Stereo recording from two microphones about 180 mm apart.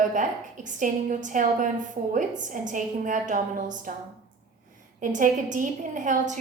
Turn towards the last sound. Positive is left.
turn(degrees=-45)  # may be behind; listen again after turning